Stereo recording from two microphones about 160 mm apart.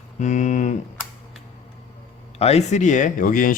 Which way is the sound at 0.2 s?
45° left (ahead or behind).